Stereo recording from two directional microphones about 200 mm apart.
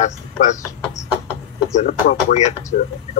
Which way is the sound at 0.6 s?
15° left (ahead or behind).